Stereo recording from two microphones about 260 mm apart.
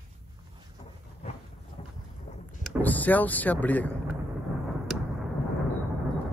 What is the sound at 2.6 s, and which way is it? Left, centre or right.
Speech, centre.